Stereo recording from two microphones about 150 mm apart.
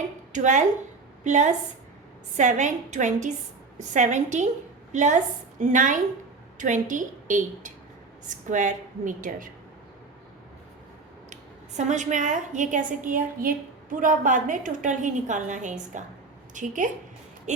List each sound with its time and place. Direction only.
0.3 s a woman's voice: 55° right (ahead or behind)
11.9 s a woman's voice: 55° right (ahead or behind)